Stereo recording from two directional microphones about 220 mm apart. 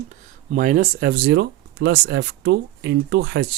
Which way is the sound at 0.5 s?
35° right (ahead or behind).